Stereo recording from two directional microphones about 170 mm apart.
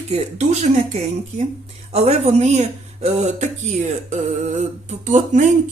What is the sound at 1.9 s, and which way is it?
A woman's voice, 40° right (ahead or behind).